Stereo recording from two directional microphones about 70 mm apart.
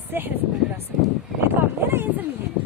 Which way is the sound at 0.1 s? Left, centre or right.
Right.